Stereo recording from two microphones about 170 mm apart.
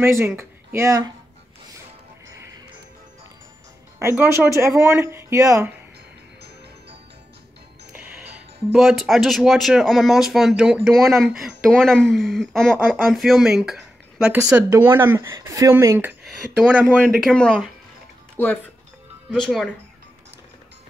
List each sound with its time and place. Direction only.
0.0 s speech: 15° right (ahead or behind)
4.0 s speech: 15° right (ahead or behind)
7.9 s music: 10° right (ahead or behind)
8.7 s speech: centre (ahead or behind)
17.0 s speech: 5° left (ahead or behind)
19.3 s speech: centre (ahead or behind)